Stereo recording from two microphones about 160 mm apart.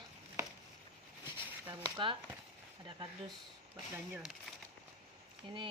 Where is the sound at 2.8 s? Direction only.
30° right (ahead or behind).